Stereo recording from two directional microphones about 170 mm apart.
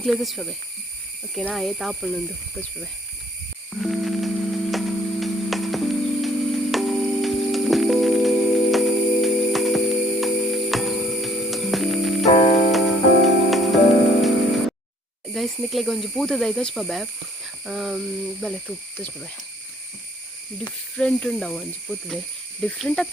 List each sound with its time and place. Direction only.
0.0 s speech: centre (ahead or behind)
3.7 s music: centre (ahead or behind)
12.2 s music: 35° left (ahead or behind)
13.2 s music: centre (ahead or behind)
15.3 s speech: centre (ahead or behind)
21.0 s speech: 5° left (ahead or behind)